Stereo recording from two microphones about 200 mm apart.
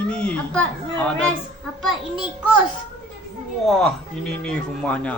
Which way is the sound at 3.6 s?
Centre (ahead or behind).